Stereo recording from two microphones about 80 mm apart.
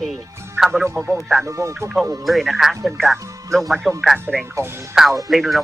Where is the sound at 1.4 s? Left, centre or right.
Right.